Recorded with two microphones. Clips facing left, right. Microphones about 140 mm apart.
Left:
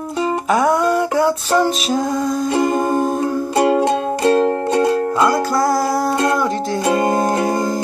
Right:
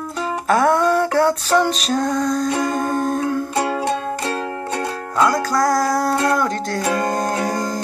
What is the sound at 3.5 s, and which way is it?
Music, 20° left (ahead or behind).